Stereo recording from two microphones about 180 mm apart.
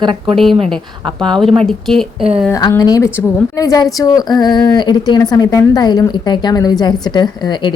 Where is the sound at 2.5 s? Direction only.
20° left (ahead or behind).